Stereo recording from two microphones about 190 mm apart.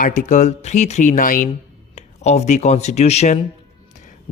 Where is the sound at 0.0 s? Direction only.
45° left (ahead or behind).